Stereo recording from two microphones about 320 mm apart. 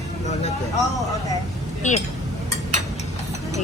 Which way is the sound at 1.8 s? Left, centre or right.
Left.